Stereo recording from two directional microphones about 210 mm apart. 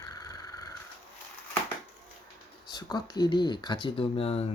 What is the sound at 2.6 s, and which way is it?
Speech, 20° left (ahead or behind).